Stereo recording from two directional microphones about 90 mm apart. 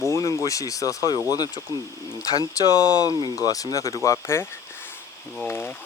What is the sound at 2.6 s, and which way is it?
Speech, 40° left (ahead or behind).